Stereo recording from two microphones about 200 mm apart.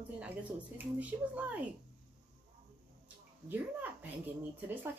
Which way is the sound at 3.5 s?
10° right (ahead or behind).